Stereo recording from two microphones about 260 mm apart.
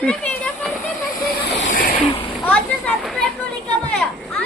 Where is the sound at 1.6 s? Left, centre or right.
Left.